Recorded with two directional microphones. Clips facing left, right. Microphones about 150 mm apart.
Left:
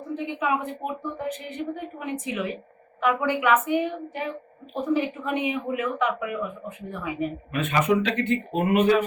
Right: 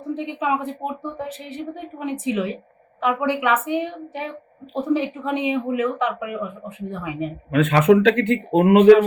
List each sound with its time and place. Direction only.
0.1 s a woman's voice: 25° right (ahead or behind)
3.0 s a woman's voice: 15° right (ahead or behind)
3.2 s a woman's voice: 25° right (ahead or behind)
7.5 s speech: 80° right